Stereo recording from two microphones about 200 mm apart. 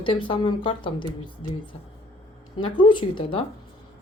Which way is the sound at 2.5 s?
25° left (ahead or behind).